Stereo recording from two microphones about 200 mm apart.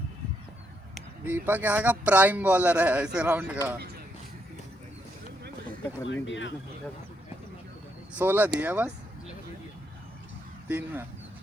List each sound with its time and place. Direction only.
0.9 s speech: 10° right (ahead or behind)
6.1 s speech: 65° left (ahead or behind)
8.2 s speech: 10° right (ahead or behind)
10.7 s speech: 10° right (ahead or behind)